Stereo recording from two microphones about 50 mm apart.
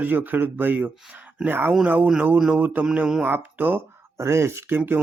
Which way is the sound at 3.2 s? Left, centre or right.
Right.